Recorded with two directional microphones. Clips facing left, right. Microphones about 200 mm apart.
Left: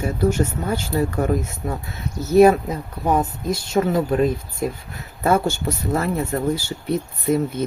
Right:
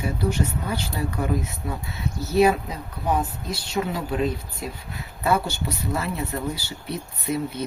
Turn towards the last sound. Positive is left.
turn(degrees=50)  # may be behind; listen again after turning